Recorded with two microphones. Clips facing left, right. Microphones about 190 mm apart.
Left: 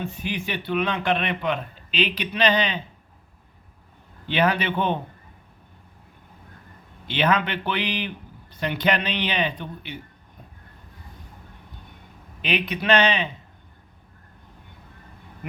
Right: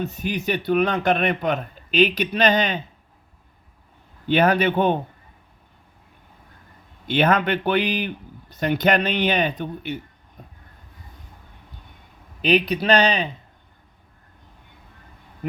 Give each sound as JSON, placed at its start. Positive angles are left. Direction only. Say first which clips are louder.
{"t": 0.0, "sound": "a man's voice", "louder": "right 4 dB", "side_deg": -45}
{"t": 4.3, "sound": "a man's voice", "louder": "right 5 dB", "side_deg": -45}
{"t": 7.1, "sound": "a man's voice", "louder": "right 4 dB", "side_deg": -45}
{"t": 12.4, "sound": "a man's voice", "louder": "right 7 dB", "side_deg": -40}